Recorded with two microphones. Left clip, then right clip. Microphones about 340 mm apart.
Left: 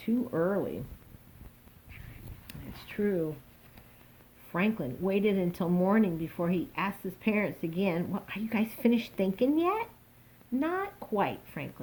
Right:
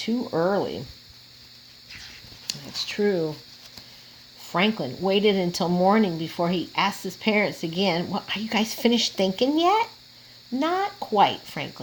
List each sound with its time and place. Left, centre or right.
0.0 s speech: right
2.8 s speech: right
4.5 s speech: right